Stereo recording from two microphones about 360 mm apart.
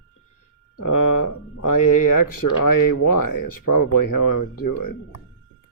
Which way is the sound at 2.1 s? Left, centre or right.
Left.